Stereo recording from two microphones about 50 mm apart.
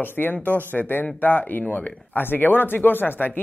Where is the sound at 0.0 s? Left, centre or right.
Left.